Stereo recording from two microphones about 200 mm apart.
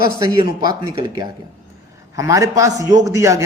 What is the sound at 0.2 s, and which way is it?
A man's voice, 20° right (ahead or behind).